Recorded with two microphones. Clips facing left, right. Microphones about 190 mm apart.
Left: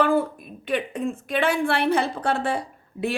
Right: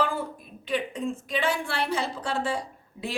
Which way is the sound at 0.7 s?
60° left (ahead or behind).